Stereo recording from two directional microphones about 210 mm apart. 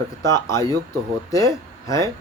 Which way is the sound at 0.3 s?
15° left (ahead or behind).